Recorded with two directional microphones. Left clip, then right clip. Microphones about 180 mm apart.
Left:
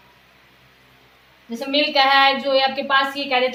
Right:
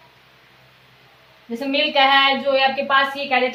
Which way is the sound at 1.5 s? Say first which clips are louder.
Even; 30° left (ahead or behind).